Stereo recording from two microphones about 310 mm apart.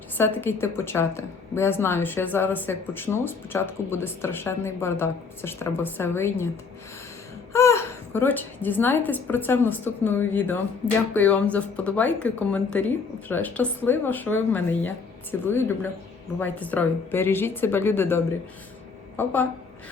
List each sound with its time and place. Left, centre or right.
0.2 s a woman's voice: centre
7.5 s a woman's voice: centre